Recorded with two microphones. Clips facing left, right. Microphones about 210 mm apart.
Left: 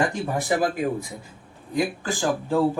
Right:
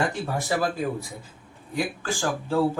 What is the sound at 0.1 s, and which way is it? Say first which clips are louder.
Speech: left 3 dB; 15° left (ahead or behind).